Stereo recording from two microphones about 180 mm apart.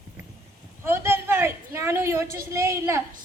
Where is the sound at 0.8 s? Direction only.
15° right (ahead or behind).